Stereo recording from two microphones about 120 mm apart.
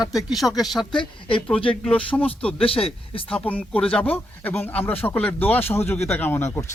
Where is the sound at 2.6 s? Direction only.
50° left (ahead or behind).